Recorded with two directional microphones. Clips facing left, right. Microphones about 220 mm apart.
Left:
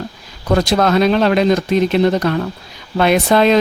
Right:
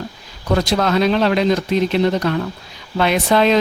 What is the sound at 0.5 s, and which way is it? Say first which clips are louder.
Speech: left 3 dB; 50° left (ahead or behind).